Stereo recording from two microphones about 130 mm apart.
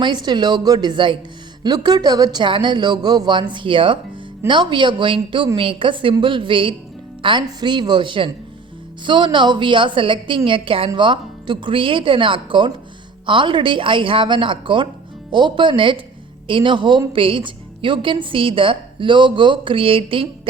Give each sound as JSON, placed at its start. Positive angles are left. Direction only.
{"t": 0.0, "sound": "a woman's voice", "side_deg": -35}